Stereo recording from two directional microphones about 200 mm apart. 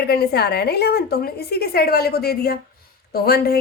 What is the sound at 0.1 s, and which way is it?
Speech, 50° left (ahead or behind).